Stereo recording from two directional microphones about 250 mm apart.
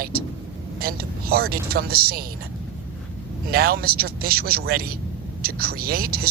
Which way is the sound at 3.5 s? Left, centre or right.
Right.